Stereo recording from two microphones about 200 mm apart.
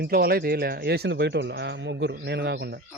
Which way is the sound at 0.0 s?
50° right (ahead or behind).